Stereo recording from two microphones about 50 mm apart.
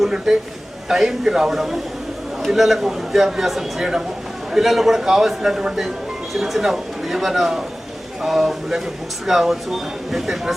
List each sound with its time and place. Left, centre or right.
0.0 s a man's voice: centre